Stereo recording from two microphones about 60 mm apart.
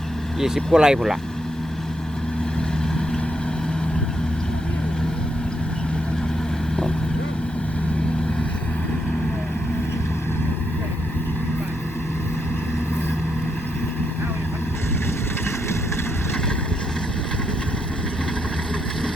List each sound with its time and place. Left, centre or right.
0.3 s speech: centre